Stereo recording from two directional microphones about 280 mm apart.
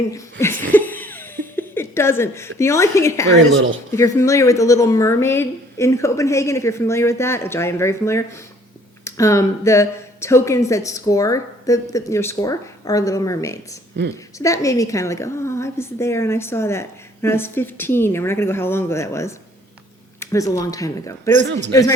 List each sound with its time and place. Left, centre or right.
0.1 s laughter: centre
1.5 s a sound: centre
2.6 s speech: centre
3.3 s speech: right
3.9 s speech: centre